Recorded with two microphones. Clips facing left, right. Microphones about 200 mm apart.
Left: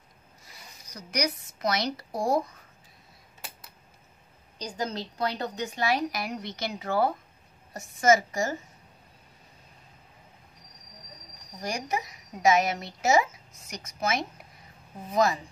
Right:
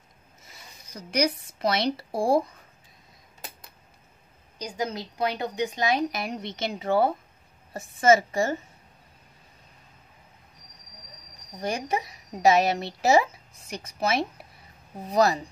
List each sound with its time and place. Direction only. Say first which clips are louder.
0.4 s zipper: right 1 dB; 25° right (ahead or behind)
1.6 s a woman's voice: right 3 dB; 30° right (ahead or behind)
4.6 s a woman's voice: right 2 dB; 10° right (ahead or behind); by 8.5 s 30° right (ahead or behind)
11.6 s a woman's voice: right 3 dB; 25° right (ahead or behind)